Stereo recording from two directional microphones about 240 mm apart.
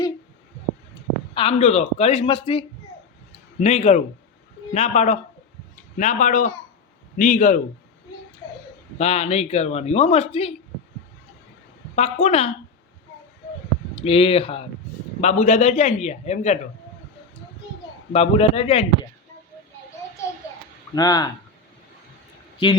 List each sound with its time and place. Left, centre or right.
1.3 s a man's voice: left
9.0 s a man's voice: left
11.9 s a man's voice: left
13.9 s a man's voice: left
18.1 s a man's voice: left
20.9 s speech: centre